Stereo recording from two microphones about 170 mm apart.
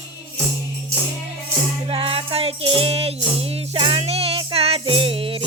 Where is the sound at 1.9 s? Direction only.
35° right (ahead or behind).